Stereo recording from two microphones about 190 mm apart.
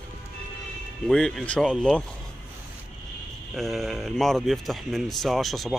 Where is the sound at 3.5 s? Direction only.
Centre (ahead or behind).